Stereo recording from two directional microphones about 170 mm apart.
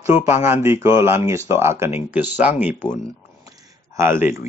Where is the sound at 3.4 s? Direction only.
20° right (ahead or behind).